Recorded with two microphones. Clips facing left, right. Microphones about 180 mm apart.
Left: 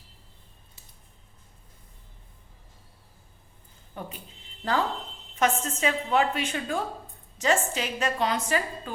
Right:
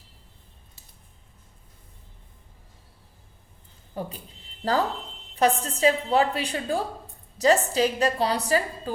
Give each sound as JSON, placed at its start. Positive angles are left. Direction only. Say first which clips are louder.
{"t": 4.0, "sound": "a woman's voice", "louder": "right 5 dB", "side_deg": -35}